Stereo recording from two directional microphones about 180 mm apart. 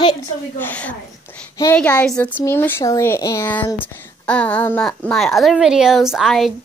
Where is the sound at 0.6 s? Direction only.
10° left (ahead or behind).